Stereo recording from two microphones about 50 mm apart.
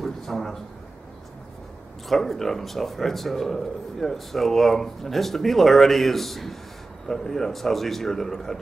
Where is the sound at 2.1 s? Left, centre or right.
Centre.